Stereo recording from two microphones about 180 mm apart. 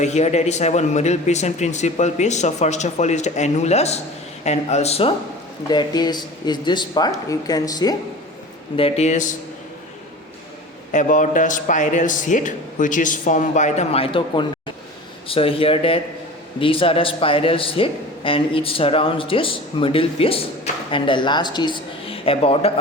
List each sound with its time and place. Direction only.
0.0 s a man's voice: 40° left (ahead or behind)
5.6 s speech: 25° left (ahead or behind)
8.7 s a man's voice: 35° left (ahead or behind)
10.9 s a man's voice: 45° left (ahead or behind)